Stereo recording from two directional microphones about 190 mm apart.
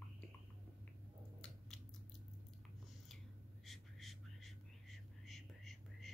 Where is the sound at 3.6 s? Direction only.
Centre (ahead or behind).